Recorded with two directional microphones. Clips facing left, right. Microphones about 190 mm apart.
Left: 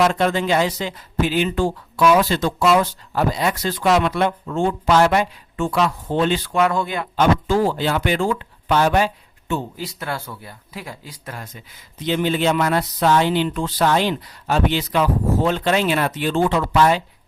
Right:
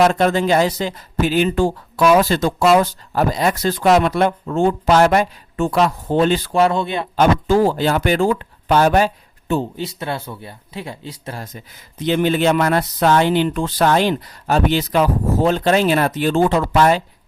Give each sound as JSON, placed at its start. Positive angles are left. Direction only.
{"t": 0.0, "sound": "speech", "side_deg": -45}
{"t": 7.2, "sound": "speech", "side_deg": -45}
{"t": 9.7, "sound": "speech", "side_deg": -25}
{"t": 12.0, "sound": "speech", "side_deg": -50}